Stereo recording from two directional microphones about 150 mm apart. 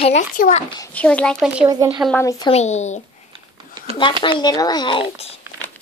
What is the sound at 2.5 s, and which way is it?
Speech, 50° left (ahead or behind).